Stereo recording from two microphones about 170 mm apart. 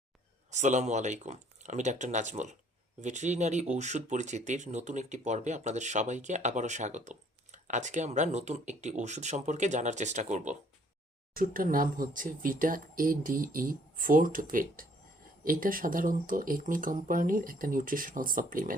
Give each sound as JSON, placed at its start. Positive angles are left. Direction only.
{"t": 0.5, "sound": "speech", "side_deg": -45}
{"t": 11.3, "sound": "speech", "side_deg": -55}